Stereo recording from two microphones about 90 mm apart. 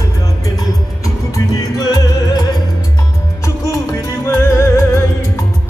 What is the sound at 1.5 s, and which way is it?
Music, 45° left (ahead or behind).